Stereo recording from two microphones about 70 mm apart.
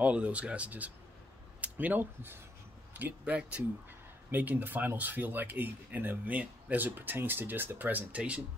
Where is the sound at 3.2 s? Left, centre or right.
Centre.